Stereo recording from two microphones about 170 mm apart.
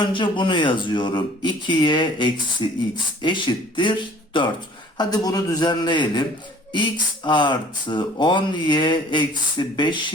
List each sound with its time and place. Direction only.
0.0 s speech: 30° left (ahead or behind)